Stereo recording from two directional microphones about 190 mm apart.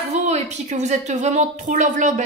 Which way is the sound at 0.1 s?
35° right (ahead or behind).